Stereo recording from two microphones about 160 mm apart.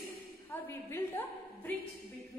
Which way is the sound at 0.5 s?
10° left (ahead or behind).